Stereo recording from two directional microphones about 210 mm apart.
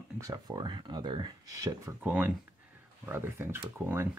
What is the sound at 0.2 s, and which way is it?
Speech, 15° right (ahead or behind).